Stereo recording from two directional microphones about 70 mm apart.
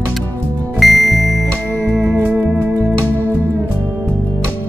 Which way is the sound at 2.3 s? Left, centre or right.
Right.